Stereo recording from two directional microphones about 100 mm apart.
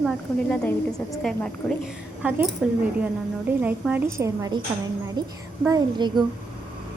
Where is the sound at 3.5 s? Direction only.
15° right (ahead or behind).